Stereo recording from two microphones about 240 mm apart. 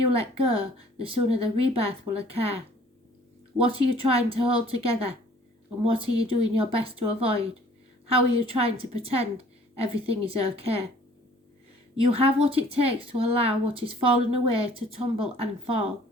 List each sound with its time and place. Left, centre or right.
0.1 s speech: right
3.6 s speech: right
12.0 s speech: right